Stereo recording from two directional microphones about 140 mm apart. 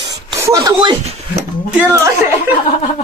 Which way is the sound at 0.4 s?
20° right (ahead or behind).